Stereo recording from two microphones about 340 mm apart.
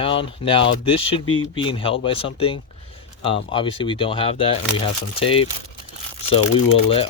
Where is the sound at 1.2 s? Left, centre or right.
Left.